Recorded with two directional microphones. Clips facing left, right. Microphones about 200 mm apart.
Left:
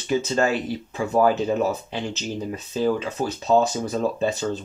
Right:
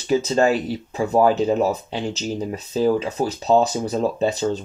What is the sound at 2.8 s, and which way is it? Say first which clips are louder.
Speech: right 3 dB; 30° right (ahead or behind).